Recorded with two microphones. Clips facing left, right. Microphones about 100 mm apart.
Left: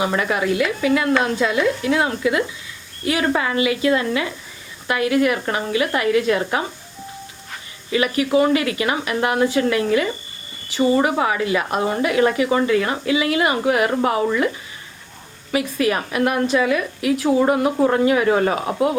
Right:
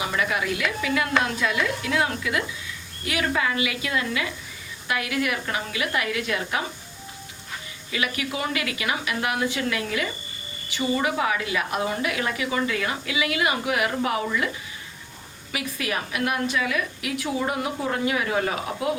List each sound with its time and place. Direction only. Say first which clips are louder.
0.0 s speech: left 6 dB; 35° left (ahead or behind)
7.9 s speech: left 9 dB; 35° left (ahead or behind)
15.5 s speech: left 9 dB; 40° left (ahead or behind)
17.4 s speech: left 10 dB; 55° left (ahead or behind)
17.9 s speech: left 8 dB; 40° left (ahead or behind)